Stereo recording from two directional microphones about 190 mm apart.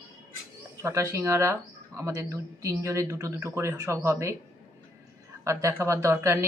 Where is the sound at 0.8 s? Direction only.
15° right (ahead or behind).